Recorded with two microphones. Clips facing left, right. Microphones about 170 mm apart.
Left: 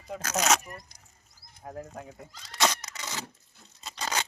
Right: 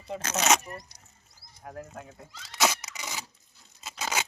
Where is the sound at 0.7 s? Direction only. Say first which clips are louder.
Right 3 dB; 30° right (ahead or behind).